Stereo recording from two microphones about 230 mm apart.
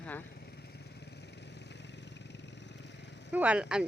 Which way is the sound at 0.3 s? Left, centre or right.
Left.